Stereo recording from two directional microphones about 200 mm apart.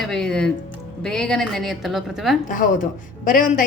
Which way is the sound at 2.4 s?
40° left (ahead or behind).